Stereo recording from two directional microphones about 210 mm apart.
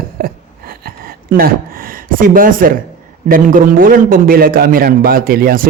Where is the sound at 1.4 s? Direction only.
45° right (ahead or behind).